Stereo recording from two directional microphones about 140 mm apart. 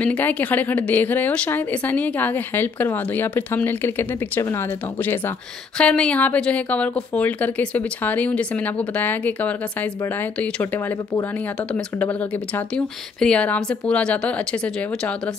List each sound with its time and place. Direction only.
0.0 s a woman's voice: 10° left (ahead or behind)
11.7 s a woman's voice: 10° left (ahead or behind)